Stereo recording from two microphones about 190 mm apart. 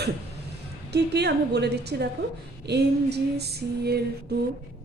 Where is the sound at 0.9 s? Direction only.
60° right (ahead or behind).